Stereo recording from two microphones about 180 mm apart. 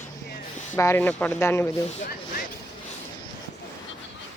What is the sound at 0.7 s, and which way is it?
Speech, 15° left (ahead or behind).